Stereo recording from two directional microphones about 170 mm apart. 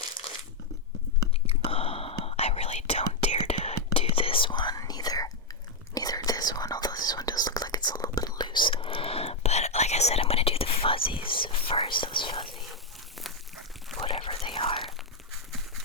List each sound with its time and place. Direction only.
1.5 s whispering: 35° left (ahead or behind)
14.0 s whispering: 35° left (ahead or behind)